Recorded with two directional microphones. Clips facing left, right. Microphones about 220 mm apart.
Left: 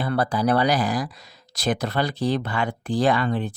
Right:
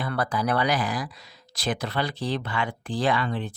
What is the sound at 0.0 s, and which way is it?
Speech, 30° left (ahead or behind).